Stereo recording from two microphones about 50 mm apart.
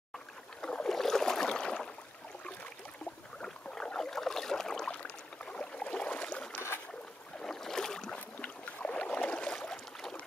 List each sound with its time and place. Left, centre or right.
0.6 s boat: centre
0.8 s boat: centre
3.3 s boat: centre
7.4 s boat: centre
8.4 s boat: left
9.5 s boat: centre